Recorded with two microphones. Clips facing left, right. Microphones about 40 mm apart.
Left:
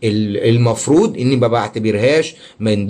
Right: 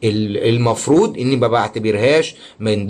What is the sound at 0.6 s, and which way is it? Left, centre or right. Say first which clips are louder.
Speech: right 1 dB; right.